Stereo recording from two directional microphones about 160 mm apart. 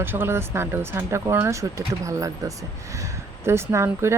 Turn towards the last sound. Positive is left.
turn(degrees=-15)  # may be behind; listen again after turning